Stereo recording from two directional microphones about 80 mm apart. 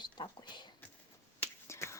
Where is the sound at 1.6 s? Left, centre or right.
Left.